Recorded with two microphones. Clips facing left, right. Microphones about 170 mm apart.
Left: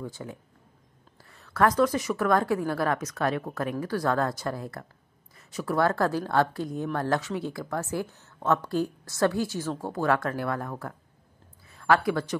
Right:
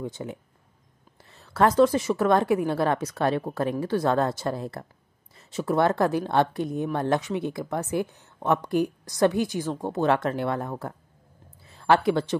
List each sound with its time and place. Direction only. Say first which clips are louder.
0.0 s speech: right 4 dB; 20° right (ahead or behind)